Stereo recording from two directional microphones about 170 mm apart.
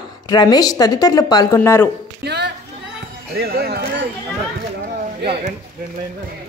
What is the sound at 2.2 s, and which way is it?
Music, 80° right.